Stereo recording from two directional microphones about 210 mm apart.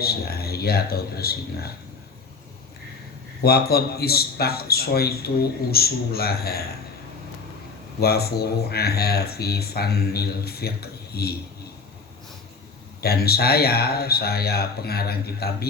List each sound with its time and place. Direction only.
0.0 s speech: 50° left (ahead or behind)
3.4 s speech: 50° left (ahead or behind)
8.0 s speech: 50° left (ahead or behind)
13.0 s speech: 50° left (ahead or behind)